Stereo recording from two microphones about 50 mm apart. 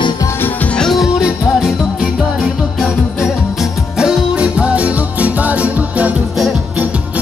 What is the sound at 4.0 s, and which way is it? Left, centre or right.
Music, centre.